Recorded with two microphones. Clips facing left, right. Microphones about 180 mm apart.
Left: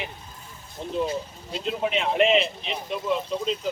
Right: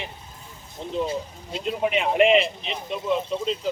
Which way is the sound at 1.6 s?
10° right (ahead or behind).